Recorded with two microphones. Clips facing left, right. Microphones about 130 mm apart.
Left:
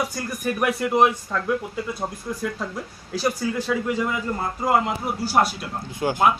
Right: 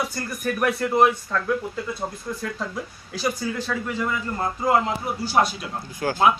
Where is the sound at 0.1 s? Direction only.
15° left (ahead or behind).